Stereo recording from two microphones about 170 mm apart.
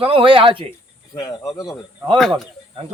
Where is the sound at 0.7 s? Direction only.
20° left (ahead or behind).